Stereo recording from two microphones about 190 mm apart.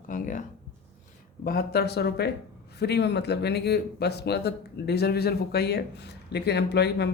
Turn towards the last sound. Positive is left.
turn(degrees=60)  # may be behind; listen again after turning